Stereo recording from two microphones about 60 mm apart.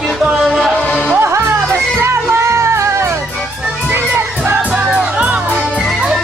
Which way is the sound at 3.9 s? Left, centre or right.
Right.